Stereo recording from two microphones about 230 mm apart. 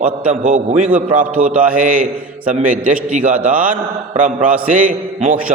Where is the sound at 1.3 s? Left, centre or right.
Centre.